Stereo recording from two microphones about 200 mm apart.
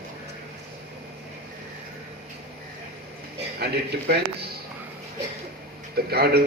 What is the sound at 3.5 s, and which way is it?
Speech, 55° right (ahead or behind).